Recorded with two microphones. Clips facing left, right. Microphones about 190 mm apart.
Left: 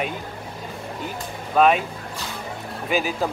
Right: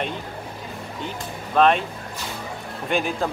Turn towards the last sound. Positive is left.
turn(degrees=5)  # may be behind; listen again after turning